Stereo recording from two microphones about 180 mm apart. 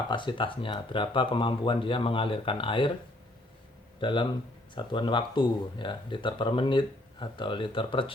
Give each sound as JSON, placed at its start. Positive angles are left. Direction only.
{"t": 0.1, "sound": "speech", "side_deg": 25}
{"t": 4.0, "sound": "speech", "side_deg": 25}